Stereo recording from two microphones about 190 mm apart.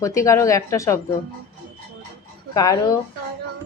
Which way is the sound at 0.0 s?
15° left (ahead or behind).